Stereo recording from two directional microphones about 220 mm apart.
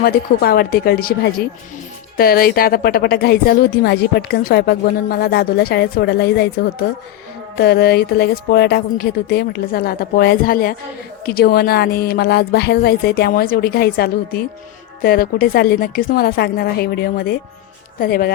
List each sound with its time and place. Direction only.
0.0 s a woman's voice: 45° left (ahead or behind)